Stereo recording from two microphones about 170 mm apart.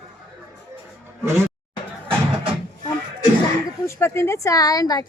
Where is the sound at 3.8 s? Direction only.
15° left (ahead or behind).